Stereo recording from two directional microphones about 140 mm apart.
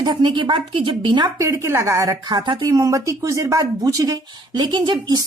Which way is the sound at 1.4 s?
20° right (ahead or behind).